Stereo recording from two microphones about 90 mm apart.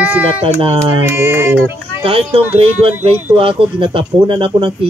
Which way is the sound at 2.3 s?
90° right.